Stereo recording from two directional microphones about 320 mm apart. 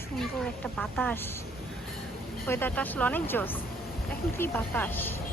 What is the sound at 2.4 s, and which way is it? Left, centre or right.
A woman's voice, centre.